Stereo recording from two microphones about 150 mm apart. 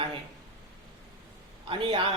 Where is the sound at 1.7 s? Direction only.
35° right (ahead or behind).